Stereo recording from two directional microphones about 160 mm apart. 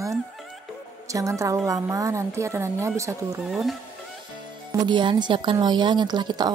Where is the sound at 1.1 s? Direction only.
20° right (ahead or behind).